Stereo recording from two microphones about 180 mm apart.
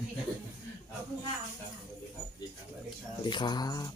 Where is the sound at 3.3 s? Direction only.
25° left (ahead or behind).